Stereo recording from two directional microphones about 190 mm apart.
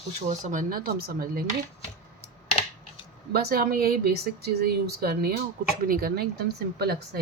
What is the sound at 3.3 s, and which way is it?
Speech, 55° right (ahead or behind).